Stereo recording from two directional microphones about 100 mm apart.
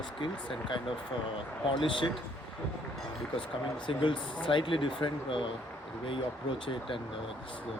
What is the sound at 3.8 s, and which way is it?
Speech, 55° left (ahead or behind).